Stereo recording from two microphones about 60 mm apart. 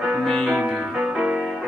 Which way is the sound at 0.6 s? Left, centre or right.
Centre.